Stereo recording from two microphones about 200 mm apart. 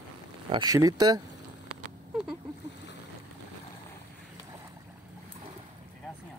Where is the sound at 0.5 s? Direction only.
20° right (ahead or behind).